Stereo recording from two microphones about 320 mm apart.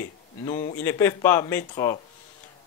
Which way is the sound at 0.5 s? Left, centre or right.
Left.